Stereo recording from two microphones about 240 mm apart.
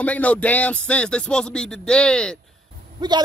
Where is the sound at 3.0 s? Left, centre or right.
Centre.